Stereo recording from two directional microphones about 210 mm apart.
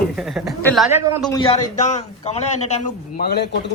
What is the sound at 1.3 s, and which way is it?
A man's voice, 25° left (ahead or behind).